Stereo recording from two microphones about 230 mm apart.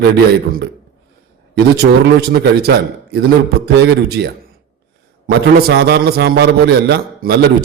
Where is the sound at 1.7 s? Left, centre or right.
Right.